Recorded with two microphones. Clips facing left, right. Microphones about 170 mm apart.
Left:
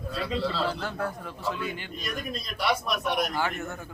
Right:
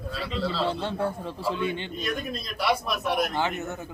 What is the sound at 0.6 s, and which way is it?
A man's voice, 25° right (ahead or behind).